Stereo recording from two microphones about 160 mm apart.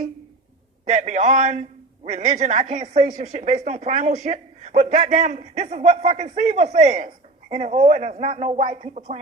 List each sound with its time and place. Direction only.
0.9 s speech: 45° right (ahead or behind)